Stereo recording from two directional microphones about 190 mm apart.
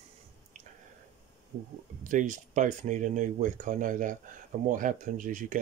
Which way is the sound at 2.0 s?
45° right (ahead or behind).